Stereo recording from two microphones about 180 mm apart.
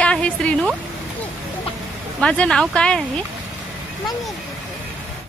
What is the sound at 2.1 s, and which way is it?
Speech, 5° left (ahead or behind).